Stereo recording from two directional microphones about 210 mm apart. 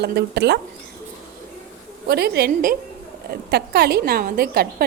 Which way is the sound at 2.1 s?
50° right (ahead or behind).